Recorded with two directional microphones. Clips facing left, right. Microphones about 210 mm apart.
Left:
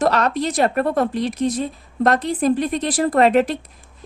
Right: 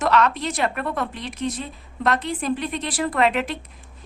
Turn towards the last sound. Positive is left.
turn(degrees=40)  # may be behind; listen again after turning